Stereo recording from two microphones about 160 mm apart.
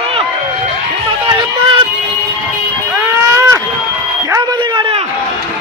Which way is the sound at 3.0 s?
15° right (ahead or behind).